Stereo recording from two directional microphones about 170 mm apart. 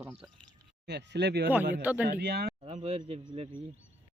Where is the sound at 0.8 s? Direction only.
80° right.